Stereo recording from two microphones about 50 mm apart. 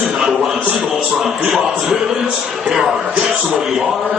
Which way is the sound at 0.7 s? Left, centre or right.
Right.